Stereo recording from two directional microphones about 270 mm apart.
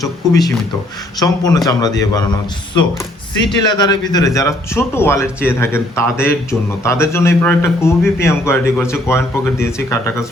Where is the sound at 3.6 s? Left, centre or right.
Centre.